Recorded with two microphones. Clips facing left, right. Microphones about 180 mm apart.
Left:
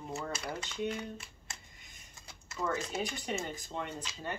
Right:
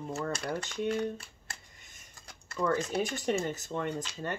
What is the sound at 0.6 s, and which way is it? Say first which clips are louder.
Speech: right 3 dB; 45° right (ahead or behind).